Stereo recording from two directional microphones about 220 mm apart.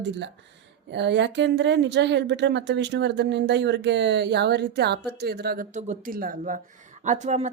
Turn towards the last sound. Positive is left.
turn(degrees=-30)  # may be behind; listen again after turning